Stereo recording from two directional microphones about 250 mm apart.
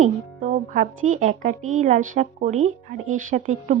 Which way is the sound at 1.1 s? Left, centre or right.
Right.